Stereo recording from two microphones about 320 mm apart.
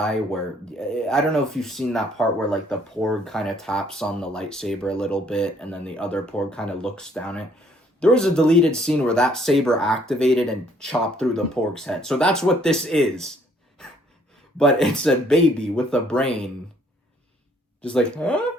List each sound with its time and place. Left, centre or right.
0.0 s speech: centre
14.6 s speech: centre
17.8 s speech: centre